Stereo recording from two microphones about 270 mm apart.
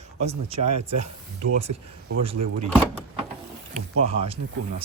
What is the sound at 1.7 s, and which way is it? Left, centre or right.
Speech, right.